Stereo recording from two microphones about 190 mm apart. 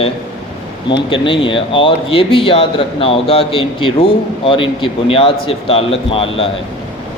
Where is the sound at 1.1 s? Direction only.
25° left (ahead or behind).